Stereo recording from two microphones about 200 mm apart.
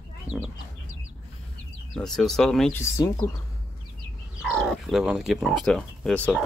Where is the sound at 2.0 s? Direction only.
Centre (ahead or behind).